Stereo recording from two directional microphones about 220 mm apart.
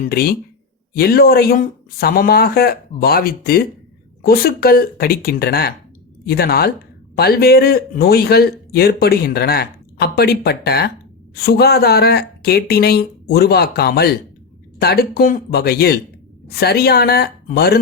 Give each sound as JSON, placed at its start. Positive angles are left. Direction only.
{"t": 0.0, "sound": "speech", "side_deg": 45}